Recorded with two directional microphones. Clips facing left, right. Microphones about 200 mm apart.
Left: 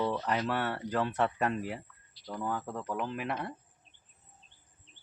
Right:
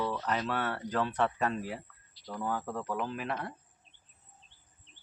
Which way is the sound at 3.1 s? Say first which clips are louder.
Left 1 dB; 10° left (ahead or behind).